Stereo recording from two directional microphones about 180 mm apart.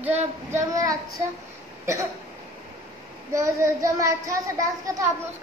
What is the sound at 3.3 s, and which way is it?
Speech, 15° right (ahead or behind).